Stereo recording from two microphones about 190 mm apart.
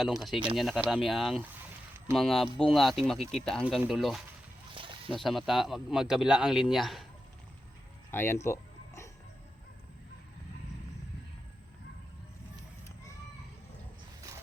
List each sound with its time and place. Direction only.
0.0 s speech: centre (ahead or behind)
4.7 s a sound: 25° right (ahead or behind)
5.1 s speech: centre (ahead or behind)
8.1 s speech: 10° left (ahead or behind)
8.4 s music: 15° left (ahead or behind)